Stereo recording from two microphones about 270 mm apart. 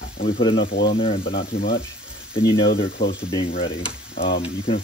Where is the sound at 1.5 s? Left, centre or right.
Left.